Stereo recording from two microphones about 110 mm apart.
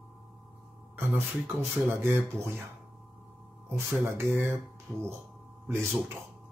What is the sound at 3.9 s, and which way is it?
Speech, 25° right (ahead or behind).